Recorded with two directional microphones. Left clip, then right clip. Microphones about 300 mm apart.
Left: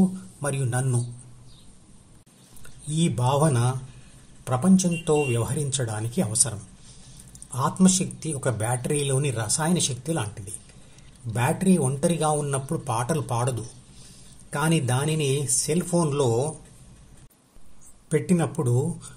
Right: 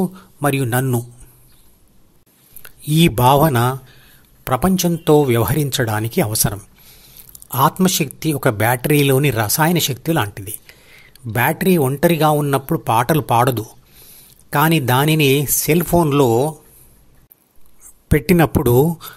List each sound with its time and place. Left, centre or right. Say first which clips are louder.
0.4 s speech: right 11 dB; right
2.6 s speech: right 12 dB; right
18.0 s speech: right 10 dB; right